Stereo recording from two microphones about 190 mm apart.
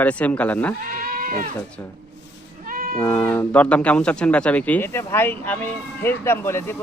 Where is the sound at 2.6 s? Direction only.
50° right (ahead or behind).